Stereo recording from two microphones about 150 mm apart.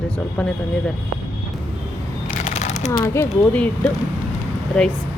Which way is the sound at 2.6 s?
50° left (ahead or behind).